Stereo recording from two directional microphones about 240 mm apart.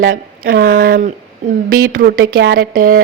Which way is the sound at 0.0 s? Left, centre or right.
Right.